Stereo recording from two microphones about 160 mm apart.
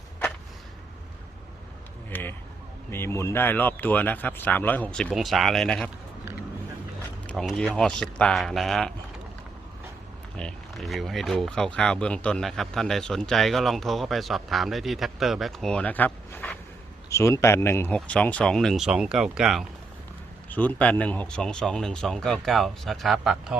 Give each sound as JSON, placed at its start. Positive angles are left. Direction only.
{"t": 2.0, "sound": "a sound", "side_deg": 10}
{"t": 2.9, "sound": "speech", "side_deg": 15}
{"t": 7.3, "sound": "speech", "side_deg": 0}
{"t": 10.3, "sound": "speech", "side_deg": 5}
{"t": 20.5, "sound": "speech", "side_deg": 10}